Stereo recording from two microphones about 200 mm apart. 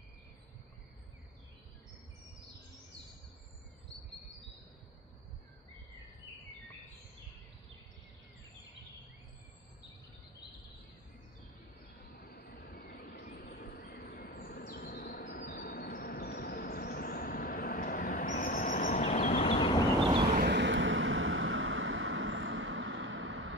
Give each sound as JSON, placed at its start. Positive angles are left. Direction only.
{"t": 12.2, "sound": "train", "side_deg": 55}
{"t": 13.6, "sound": "bird", "side_deg": 55}
{"t": 20.3, "sound": "vehicle", "side_deg": -60}